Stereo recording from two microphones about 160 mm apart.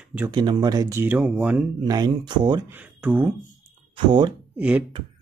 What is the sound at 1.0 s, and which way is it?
Speech, 10° right (ahead or behind).